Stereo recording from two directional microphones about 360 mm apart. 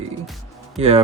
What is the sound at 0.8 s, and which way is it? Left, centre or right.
Speech, centre.